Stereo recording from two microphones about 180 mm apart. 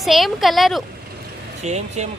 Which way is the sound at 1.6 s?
40° right (ahead or behind).